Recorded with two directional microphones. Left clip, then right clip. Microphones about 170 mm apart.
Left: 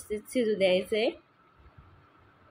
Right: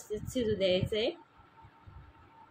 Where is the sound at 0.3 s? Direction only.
25° left (ahead or behind).